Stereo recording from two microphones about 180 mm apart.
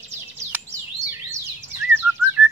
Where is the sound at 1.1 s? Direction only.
15° right (ahead or behind).